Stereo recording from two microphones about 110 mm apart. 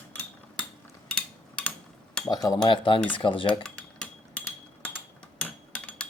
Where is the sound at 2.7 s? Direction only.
50° left (ahead or behind).